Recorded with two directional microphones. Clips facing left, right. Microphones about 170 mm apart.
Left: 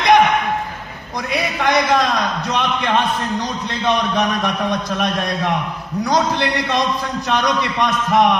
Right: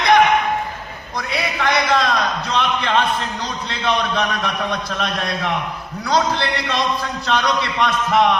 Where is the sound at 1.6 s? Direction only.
20° left (ahead or behind).